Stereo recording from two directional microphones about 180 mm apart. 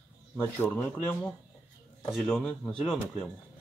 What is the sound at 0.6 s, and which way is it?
Speech, 10° left (ahead or behind).